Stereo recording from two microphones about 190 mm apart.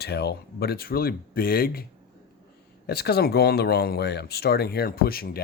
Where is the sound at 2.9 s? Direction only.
55° left (ahead or behind).